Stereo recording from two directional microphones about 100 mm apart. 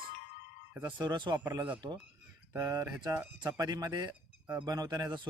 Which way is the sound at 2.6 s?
35° right (ahead or behind).